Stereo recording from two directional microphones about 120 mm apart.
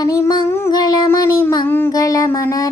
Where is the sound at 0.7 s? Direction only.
35° left (ahead or behind).